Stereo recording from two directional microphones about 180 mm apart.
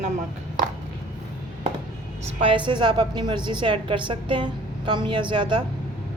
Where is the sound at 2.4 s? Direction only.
25° right (ahead or behind).